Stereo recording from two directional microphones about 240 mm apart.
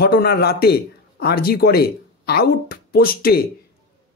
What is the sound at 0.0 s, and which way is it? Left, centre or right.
A man's voice, left.